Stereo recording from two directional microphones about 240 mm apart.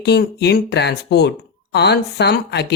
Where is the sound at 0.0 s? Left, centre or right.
Left.